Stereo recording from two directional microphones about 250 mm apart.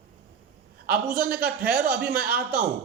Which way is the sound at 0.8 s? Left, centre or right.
Right.